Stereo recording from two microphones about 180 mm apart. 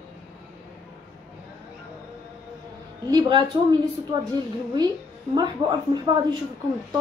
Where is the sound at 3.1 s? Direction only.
20° right (ahead or behind).